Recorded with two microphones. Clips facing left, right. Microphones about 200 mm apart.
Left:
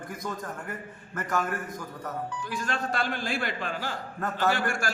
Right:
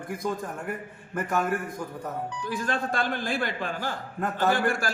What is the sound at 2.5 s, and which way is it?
A man's voice, 50° right (ahead or behind).